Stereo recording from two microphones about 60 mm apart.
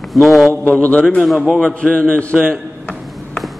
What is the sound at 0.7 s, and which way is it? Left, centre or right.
A man's voice, left.